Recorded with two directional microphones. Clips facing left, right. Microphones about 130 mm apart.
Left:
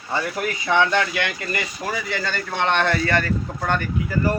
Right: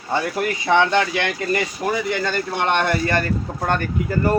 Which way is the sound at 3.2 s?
35° right (ahead or behind).